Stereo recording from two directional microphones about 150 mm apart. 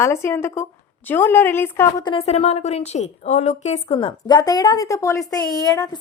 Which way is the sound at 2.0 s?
40° left (ahead or behind).